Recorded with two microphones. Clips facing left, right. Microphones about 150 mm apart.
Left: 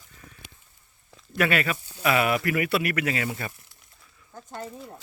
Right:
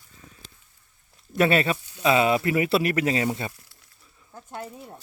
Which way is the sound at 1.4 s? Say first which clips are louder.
Right 4 dB; 30° right (ahead or behind).